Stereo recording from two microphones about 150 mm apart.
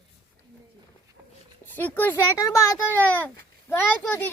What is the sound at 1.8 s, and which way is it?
Speech, 10° left (ahead or behind).